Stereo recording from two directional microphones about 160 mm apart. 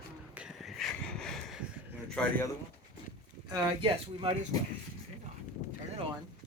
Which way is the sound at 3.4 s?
30° right (ahead or behind).